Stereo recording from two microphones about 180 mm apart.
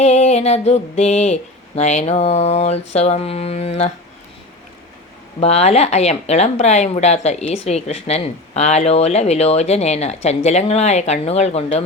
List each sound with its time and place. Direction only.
0.0 s speech: 35° left (ahead or behind)
5.4 s speech: 35° left (ahead or behind)